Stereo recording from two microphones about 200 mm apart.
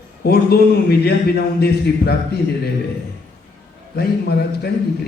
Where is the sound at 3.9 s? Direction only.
55° left (ahead or behind).